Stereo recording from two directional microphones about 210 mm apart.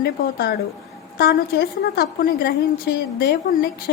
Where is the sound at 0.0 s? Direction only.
50° left (ahead or behind).